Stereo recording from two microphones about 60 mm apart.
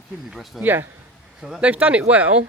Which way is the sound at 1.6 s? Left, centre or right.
Right.